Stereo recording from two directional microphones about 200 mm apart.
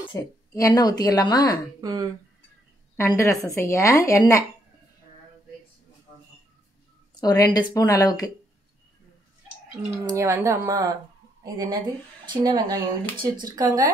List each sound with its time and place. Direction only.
0.1 s a woman's voice: 15° left (ahead or behind)
1.8 s speech: 20° right (ahead or behind)
3.0 s a woman's voice: 15° left (ahead or behind)
7.2 s a woman's voice: 20° left (ahead or behind)
9.8 s speech: 15° right (ahead or behind)